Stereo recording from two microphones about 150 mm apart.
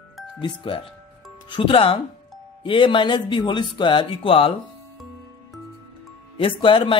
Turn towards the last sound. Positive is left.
turn(degrees=35)  # may be behind; listen again after turning